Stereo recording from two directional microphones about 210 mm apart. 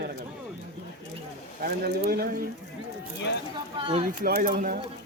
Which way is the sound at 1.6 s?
45° right (ahead or behind).